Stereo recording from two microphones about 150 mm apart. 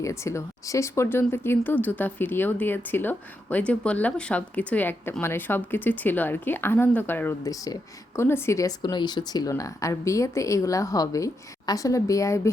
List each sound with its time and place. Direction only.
0.0 s speech: 20° left (ahead or behind)